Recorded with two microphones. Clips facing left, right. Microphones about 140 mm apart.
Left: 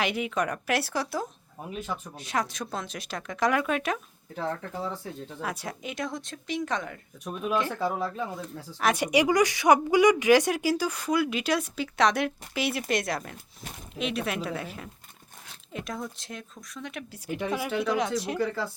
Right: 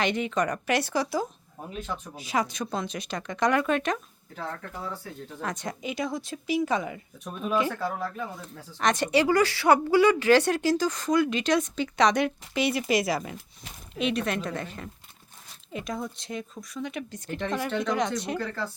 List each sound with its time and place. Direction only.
0.0 s speech: 5° left (ahead or behind)
5.4 s speech: 5° left (ahead or behind)
7.7 s speech: 15° left (ahead or behind)